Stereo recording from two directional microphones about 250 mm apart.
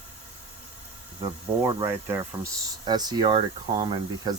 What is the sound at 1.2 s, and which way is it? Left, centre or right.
Speech, centre.